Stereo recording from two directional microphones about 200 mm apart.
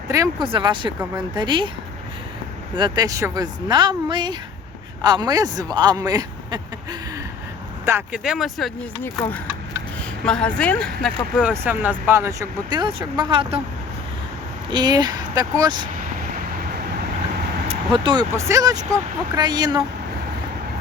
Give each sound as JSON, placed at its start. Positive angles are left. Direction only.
{"t": 0.4, "sound": "speech", "side_deg": -25}
{"t": 2.7, "sound": "speech", "side_deg": -20}
{"t": 7.9, "sound": "speech", "side_deg": -10}
{"t": 10.2, "sound": "speech", "side_deg": 5}
{"t": 14.7, "sound": "speech", "side_deg": -20}
{"t": 16.3, "sound": "vehicle", "side_deg": -45}
{"t": 17.7, "sound": "speech", "side_deg": -25}